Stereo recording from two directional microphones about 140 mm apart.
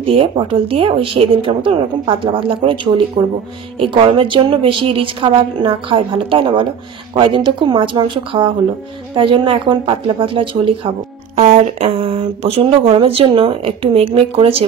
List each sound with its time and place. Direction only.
0.0 s a woman's voice: 40° right (ahead or behind)
11.3 s speech: 55° right (ahead or behind)